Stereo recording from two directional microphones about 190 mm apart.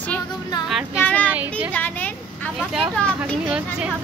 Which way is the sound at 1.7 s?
10° left (ahead or behind).